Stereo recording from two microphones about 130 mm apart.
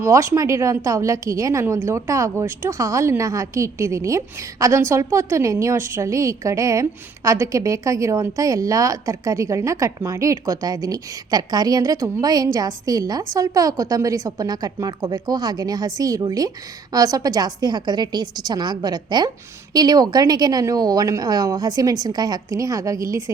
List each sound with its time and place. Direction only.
0.0 s a woman's voice: 20° right (ahead or behind)